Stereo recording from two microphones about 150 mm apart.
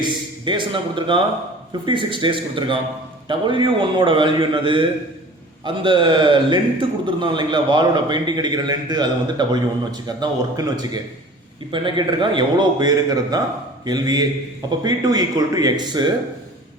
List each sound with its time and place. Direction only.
0.0 s a man's voice: 30° right (ahead or behind)